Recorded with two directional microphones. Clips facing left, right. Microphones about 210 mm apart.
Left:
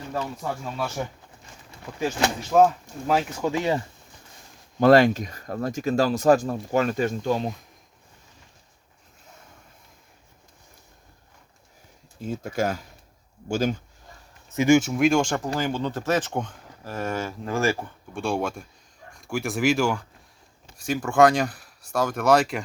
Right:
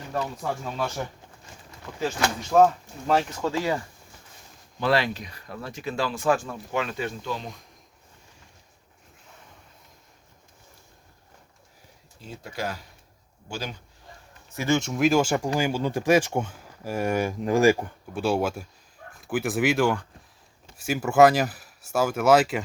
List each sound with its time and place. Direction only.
0.1 s speech: 5° left (ahead or behind)
2.0 s speech: 20° left (ahead or behind)
2.5 s speech: 5° left (ahead or behind)
4.8 s speech: 45° left (ahead or behind)
12.2 s speech: 45° left (ahead or behind)
14.5 s speech: 20° left (ahead or behind)
14.8 s speech: centre (ahead or behind); by 18.2 s 15° right (ahead or behind)
18.2 s speech: 5° right (ahead or behind)